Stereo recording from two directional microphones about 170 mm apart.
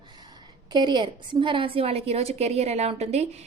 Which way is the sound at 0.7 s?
25° right (ahead or behind).